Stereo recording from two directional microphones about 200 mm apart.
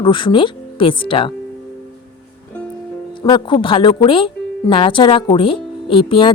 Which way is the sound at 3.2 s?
25° left (ahead or behind).